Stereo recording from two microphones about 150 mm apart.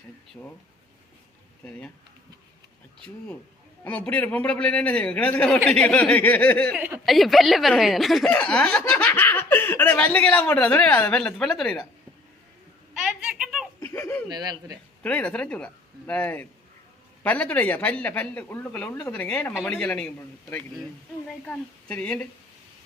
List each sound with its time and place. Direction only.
3.8 s speech: 10° left (ahead or behind)
6.7 s speech: 10° right (ahead or behind)
12.9 s a sound: 5° right (ahead or behind)
13.7 s giggle: 20° left (ahead or behind)
14.3 s speech: 25° right (ahead or behind)
15.0 s speech: 10° left (ahead or behind)
21.4 s speech: 10° left (ahead or behind)